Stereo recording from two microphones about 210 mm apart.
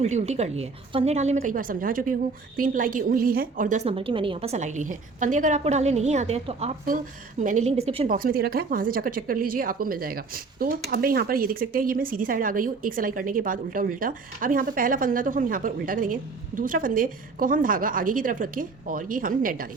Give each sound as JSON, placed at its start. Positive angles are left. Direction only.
{"t": 0.0, "sound": "speech", "side_deg": -30}
{"t": 8.0, "sound": "speech", "side_deg": -45}